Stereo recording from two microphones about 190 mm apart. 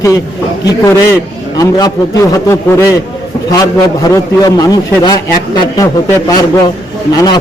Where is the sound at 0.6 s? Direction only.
15° left (ahead or behind).